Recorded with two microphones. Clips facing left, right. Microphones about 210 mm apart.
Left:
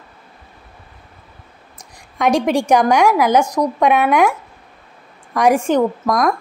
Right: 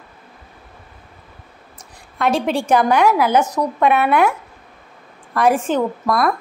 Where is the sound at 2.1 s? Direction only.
15° left (ahead or behind).